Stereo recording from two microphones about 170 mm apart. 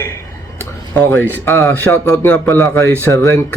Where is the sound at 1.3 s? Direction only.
15° left (ahead or behind).